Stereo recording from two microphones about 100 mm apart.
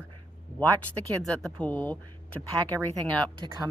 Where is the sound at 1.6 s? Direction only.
20° left (ahead or behind).